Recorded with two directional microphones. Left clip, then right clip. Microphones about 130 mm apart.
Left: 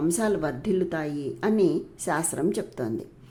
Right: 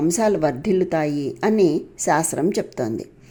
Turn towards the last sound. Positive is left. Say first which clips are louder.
# right 6 dB
turn(degrees=-25)  # may be behind; listen again after turning